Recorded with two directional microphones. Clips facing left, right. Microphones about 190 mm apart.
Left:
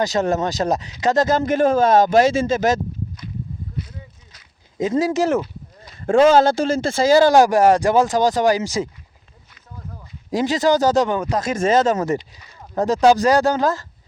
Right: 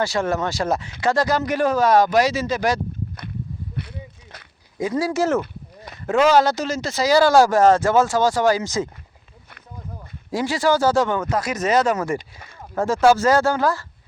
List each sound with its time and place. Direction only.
0.0 s speech: 20° left (ahead or behind)
3.8 s a sound: 65° right (ahead or behind)
4.8 s speech: 20° left (ahead or behind)
5.4 s a sound: 60° right (ahead or behind)
6.1 s speech: 30° left (ahead or behind); by 8.9 s 15° left (ahead or behind)
10.3 s speech: 20° left (ahead or behind)